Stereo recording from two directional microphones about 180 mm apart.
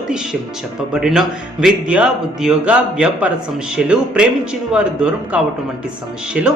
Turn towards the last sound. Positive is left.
turn(degrees=-5)  # may be behind; listen again after turning